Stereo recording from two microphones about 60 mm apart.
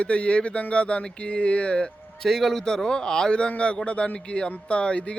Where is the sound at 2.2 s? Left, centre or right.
Centre.